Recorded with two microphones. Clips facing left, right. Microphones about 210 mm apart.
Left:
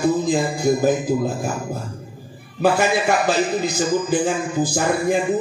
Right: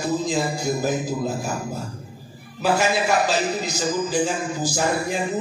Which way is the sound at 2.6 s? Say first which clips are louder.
Left 3 dB; 55° left (ahead or behind).